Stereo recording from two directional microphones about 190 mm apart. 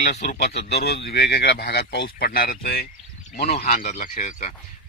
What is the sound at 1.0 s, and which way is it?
Speech, 60° left (ahead or behind).